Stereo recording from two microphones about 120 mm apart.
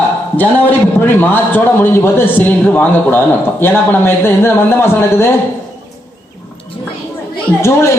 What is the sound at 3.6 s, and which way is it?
A woman's voice, 20° left (ahead or behind).